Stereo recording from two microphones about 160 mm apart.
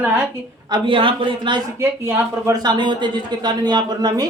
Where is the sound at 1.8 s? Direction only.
15° right (ahead or behind).